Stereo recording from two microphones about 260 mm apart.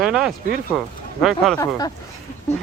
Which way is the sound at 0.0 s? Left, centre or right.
Centre.